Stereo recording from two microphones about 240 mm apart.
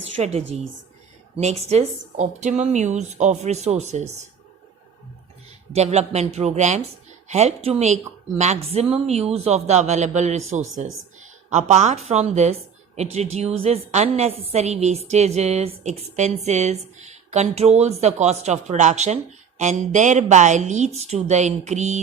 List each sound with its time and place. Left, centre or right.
0.2 s a woman's voice: right
5.7 s a woman's voice: right